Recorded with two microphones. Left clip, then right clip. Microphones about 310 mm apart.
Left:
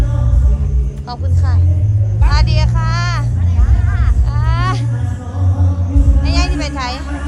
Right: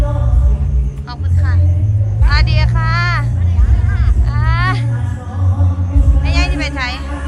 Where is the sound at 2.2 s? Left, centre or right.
Centre.